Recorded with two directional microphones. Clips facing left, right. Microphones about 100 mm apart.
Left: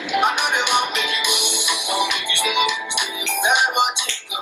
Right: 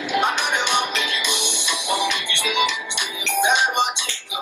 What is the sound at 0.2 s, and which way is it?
Music, 15° left (ahead or behind).